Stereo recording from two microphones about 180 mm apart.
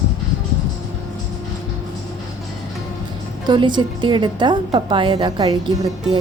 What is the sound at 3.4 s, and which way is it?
A woman's voice, 25° right (ahead or behind).